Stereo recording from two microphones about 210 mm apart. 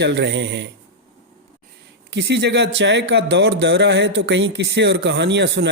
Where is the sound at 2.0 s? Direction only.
55° right (ahead or behind).